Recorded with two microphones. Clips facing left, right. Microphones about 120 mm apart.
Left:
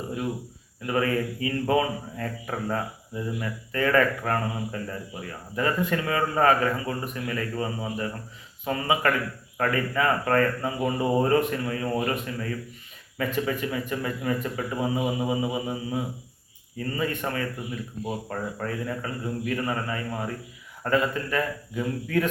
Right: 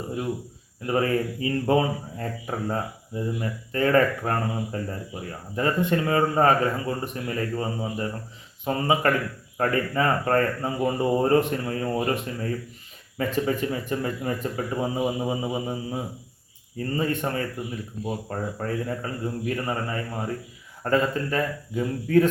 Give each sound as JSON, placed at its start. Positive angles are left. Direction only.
{"t": 0.9, "sound": "a man's voice", "side_deg": -30}